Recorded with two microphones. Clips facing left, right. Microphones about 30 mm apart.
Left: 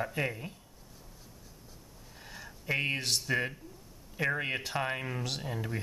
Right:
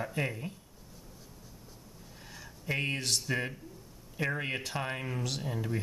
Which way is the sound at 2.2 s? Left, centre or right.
Centre.